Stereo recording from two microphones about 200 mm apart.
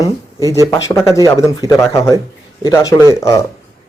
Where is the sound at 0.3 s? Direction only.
15° right (ahead or behind).